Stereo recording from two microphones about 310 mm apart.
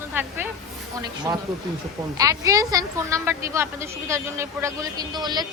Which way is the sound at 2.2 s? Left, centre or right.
Centre.